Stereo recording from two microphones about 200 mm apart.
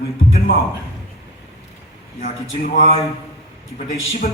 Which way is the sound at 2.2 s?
40° left (ahead or behind).